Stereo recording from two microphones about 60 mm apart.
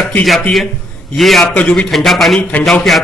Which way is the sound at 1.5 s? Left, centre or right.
Centre.